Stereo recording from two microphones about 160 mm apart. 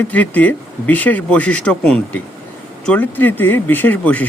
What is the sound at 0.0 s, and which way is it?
Speech, 10° left (ahead or behind).